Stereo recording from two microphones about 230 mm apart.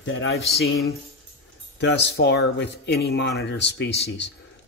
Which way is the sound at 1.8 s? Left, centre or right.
Left.